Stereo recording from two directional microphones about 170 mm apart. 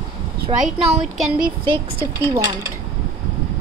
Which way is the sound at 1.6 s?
30° right (ahead or behind).